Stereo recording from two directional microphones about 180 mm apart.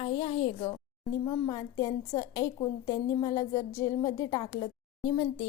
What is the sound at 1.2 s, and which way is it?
A woman's voice, 20° left (ahead or behind).